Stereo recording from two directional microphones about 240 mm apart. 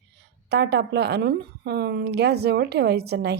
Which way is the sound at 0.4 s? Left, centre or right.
Right.